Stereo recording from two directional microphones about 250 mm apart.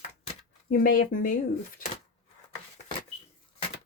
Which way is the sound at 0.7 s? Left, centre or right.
Left.